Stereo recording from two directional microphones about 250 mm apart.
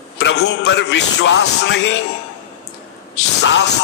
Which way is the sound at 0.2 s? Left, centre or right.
Left.